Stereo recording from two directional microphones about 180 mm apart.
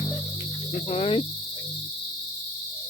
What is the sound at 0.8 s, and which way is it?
Speech, 35° left (ahead or behind).